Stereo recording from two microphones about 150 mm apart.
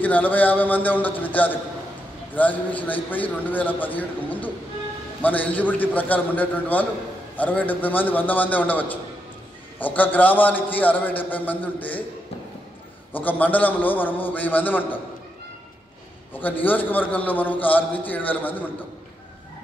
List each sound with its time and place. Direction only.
0.0 s a man's voice: 10° left (ahead or behind)
13.1 s a man's voice: 10° left (ahead or behind)
16.3 s a man's voice: 10° left (ahead or behind)